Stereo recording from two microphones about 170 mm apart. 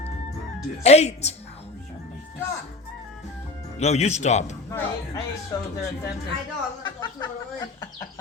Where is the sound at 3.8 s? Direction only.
40° left (ahead or behind).